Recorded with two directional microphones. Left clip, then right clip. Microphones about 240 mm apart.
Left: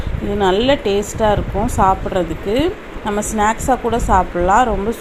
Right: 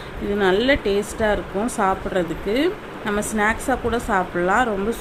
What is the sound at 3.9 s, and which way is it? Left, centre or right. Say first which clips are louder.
Speech: left 6 dB; centre.